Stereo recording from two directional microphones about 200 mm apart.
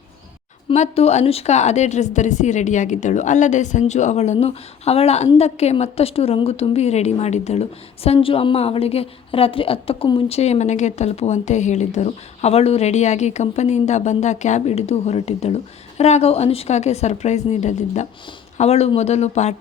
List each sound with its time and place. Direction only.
0.7 s a woman's voice: 30° left (ahead or behind)